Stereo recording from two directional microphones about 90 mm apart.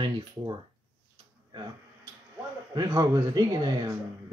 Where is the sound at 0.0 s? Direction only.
60° right (ahead or behind).